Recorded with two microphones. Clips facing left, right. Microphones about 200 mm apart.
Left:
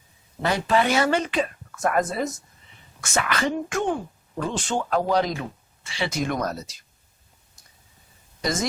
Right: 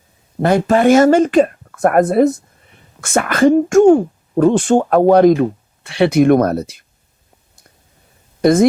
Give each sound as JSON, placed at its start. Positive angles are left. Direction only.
{"t": 0.4, "sound": "speech", "side_deg": -50}
{"t": 8.4, "sound": "speech", "side_deg": -55}